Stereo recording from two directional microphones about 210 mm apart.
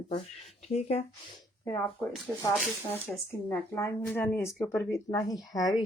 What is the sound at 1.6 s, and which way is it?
Speech, 10° left (ahead or behind).